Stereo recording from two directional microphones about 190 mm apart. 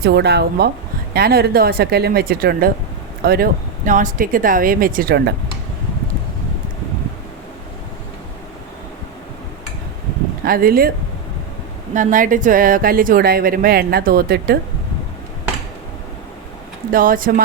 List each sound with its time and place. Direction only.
0.0 s a woman's voice: 60° right (ahead or behind)
10.4 s a woman's voice: 50° right (ahead or behind)
11.9 s a woman's voice: 45° right (ahead or behind)
16.9 s a woman's voice: 45° right (ahead or behind)